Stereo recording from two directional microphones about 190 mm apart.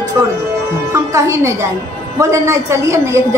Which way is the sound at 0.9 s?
15° right (ahead or behind).